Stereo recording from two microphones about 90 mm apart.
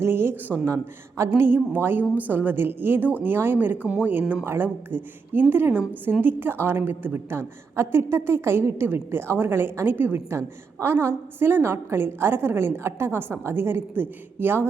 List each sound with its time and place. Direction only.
0.0 s a woman's voice: 25° right (ahead or behind)
1.3 s a woman's voice: 20° right (ahead or behind)
3.8 s speech: 10° right (ahead or behind)
4.1 s a woman's voice: 20° right (ahead or behind)